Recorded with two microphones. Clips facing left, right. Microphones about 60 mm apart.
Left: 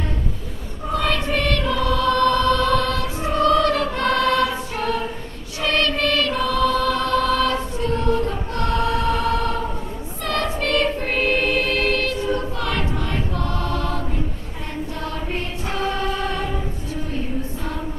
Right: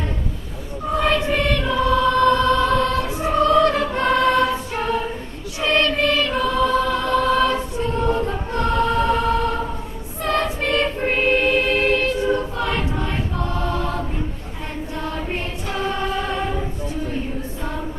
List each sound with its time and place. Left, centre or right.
0.9 s choir: centre
9.0 s music: centre
10.2 s choir: centre